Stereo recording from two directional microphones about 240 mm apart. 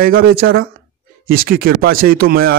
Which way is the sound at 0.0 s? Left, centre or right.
Right.